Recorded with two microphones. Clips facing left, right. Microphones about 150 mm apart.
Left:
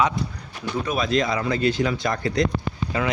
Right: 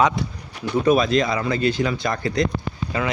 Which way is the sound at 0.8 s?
55° right (ahead or behind).